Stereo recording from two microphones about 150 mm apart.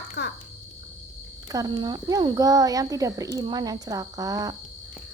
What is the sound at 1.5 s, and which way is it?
Speech, 25° right (ahead or behind).